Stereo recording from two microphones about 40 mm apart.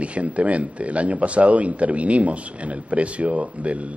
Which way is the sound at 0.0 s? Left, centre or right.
Right.